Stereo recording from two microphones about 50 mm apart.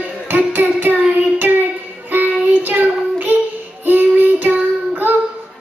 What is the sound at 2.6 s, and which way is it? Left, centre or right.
Child singing, right.